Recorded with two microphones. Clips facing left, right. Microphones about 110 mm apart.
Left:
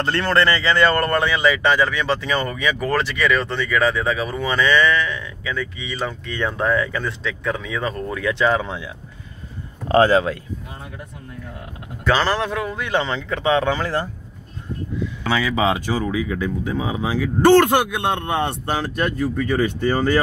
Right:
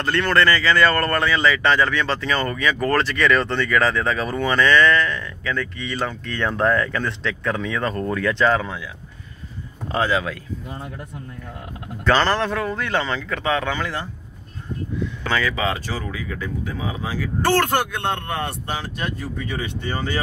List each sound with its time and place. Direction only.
0.0 s speech: 25° left (ahead or behind); by 8.6 s 10° left (ahead or behind)
8.6 s a man's voice: 25° left (ahead or behind)
9.8 s speech: 50° left (ahead or behind)
12.0 s a man's voice: 10° left (ahead or behind); by 14.0 s 35° left (ahead or behind)
15.2 s speech: 10° left (ahead or behind)
18.7 s speech: 45° left (ahead or behind)